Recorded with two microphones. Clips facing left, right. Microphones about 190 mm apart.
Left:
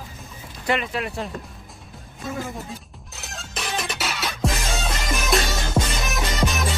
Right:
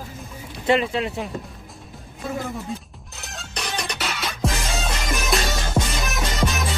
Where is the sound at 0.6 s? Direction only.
30° right (ahead or behind).